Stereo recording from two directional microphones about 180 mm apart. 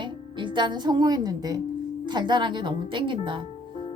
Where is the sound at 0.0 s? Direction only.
25° right (ahead or behind).